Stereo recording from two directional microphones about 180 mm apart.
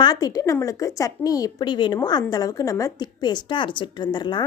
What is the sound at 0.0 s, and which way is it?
A woman's voice, 20° left (ahead or behind).